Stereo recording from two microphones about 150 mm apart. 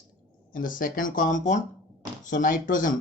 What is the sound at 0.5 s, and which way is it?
Speech, 65° left (ahead or behind).